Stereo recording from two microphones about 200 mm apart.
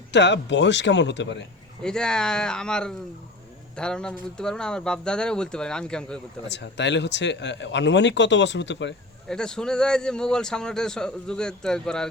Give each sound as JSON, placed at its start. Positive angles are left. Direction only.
{"t": 0.1, "sound": "speech", "side_deg": 60}
{"t": 1.8, "sound": "a man's voice", "side_deg": 5}
{"t": 6.5, "sound": "speech", "side_deg": 60}
{"t": 9.3, "sound": "a man's voice", "side_deg": 5}